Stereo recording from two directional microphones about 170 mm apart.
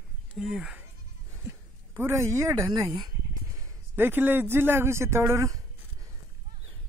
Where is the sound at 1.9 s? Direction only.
15° right (ahead or behind).